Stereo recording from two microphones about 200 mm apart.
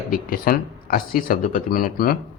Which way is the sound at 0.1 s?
45° left (ahead or behind).